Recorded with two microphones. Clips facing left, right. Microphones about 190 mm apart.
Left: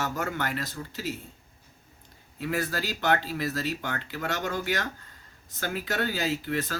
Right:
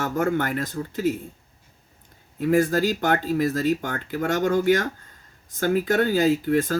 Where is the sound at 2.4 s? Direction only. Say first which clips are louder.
Right 10 dB; 45° right (ahead or behind).